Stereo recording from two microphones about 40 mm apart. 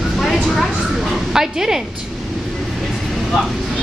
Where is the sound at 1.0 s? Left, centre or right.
Centre.